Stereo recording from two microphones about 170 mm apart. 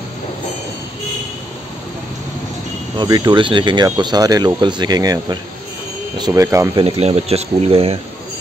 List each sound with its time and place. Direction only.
3.0 s speech: 25° right (ahead or behind)
7.0 s speech: 35° right (ahead or behind)